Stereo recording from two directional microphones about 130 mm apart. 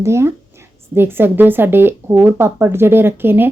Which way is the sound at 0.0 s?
20° right (ahead or behind).